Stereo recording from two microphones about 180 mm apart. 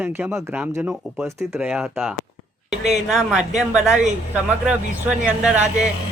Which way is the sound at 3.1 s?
Centre (ahead or behind).